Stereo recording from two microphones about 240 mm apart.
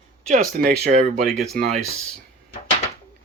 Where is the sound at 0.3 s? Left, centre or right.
Right.